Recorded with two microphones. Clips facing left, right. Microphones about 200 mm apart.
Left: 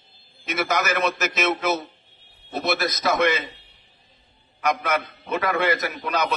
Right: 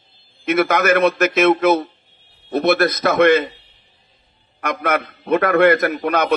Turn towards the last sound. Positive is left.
turn(degrees=-55)  # may be behind; listen again after turning